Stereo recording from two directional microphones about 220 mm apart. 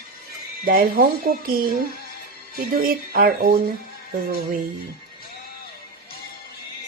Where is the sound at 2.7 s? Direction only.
40° right (ahead or behind).